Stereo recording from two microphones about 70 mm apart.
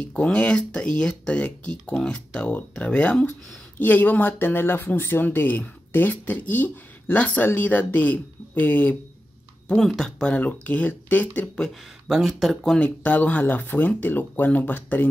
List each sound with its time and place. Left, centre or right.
0.0 s speech: centre
9.8 s speech: centre
10.3 s speech: left
12.1 s speech: centre
12.7 s speech: left